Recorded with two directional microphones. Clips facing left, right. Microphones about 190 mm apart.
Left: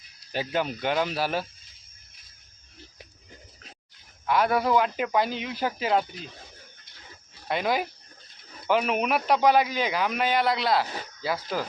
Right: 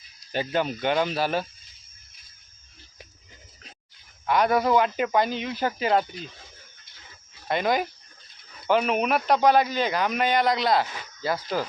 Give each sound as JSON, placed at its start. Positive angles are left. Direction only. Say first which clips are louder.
{"t": 0.3, "sound": "a man's voice", "louder": "right 2 dB", "side_deg": 5}
{"t": 4.3, "sound": "a man's voice", "louder": "right 2 dB", "side_deg": 5}
{"t": 7.4, "sound": "a man's voice", "louder": "right 2 dB", "side_deg": 5}
{"t": 10.8, "sound": "speech", "louder": "left 3 dB", "side_deg": 35}
{"t": 11.2, "sound": "a man's voice", "louder": "right 2 dB", "side_deg": 5}